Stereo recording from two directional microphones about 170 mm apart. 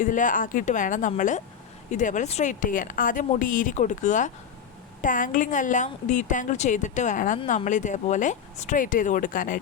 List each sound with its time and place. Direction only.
0.0 s a woman's voice: 50° left (ahead or behind)